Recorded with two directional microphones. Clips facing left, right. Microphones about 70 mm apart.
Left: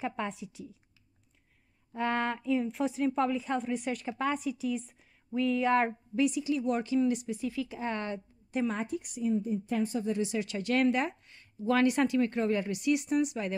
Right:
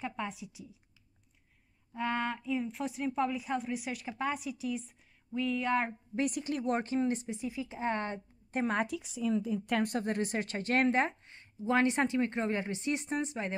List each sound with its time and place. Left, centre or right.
0.0 s a woman's voice: centre
2.0 s a woman's voice: centre
6.1 s speech: right
7.3 s a woman's voice: right
8.6 s speech: right